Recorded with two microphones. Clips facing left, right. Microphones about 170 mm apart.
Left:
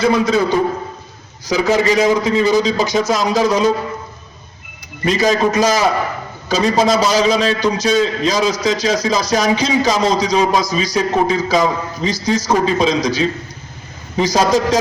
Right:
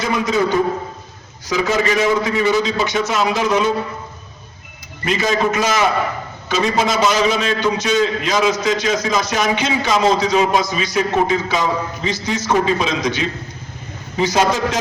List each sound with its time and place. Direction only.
0.0 s a man's voice: 35° left (ahead or behind)
5.0 s a man's voice: 35° left (ahead or behind)